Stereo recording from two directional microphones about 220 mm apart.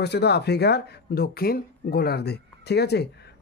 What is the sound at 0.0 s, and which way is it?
Speech, 50° left (ahead or behind).